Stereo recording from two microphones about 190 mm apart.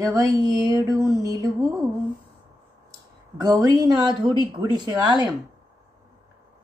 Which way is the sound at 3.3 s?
20° right (ahead or behind).